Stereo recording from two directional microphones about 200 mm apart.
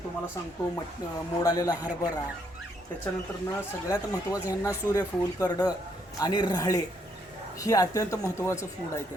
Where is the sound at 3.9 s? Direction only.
15° left (ahead or behind).